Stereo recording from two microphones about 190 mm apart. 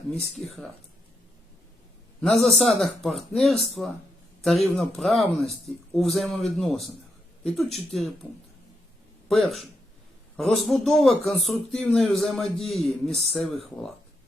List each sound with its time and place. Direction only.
0.4 s speech: centre (ahead or behind)
2.3 s speech: centre (ahead or behind)
9.3 s speech: centre (ahead or behind)